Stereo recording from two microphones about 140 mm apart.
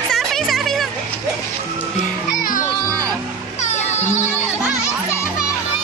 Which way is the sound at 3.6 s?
55° left (ahead or behind).